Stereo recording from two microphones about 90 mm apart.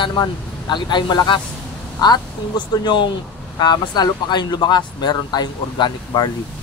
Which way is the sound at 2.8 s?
65° left (ahead or behind).